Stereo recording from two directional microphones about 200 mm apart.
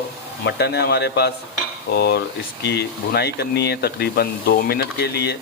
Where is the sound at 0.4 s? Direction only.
55° left (ahead or behind).